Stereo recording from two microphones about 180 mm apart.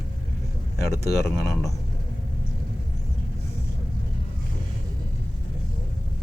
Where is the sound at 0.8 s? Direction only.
65° left (ahead or behind).